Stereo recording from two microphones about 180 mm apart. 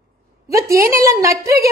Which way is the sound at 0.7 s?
55° right (ahead or behind).